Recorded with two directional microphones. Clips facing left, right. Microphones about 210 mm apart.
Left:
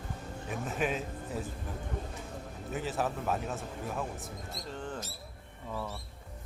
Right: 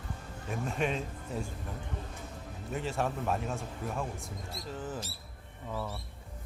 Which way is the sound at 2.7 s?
Centre (ahead or behind).